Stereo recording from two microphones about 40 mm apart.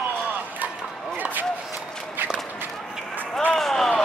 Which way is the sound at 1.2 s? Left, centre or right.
Right.